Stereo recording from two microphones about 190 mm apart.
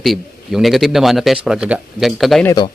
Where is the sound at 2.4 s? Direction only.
20° left (ahead or behind).